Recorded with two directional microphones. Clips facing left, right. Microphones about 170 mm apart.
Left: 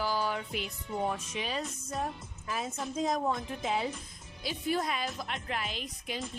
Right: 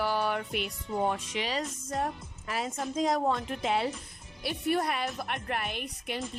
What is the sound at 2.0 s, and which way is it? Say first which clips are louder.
A woman's voice: right 3 dB; 75° right (ahead or behind).